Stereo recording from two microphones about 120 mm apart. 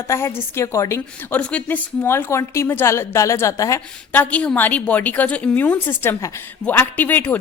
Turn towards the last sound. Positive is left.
turn(degrees=15)  # may be behind; listen again after turning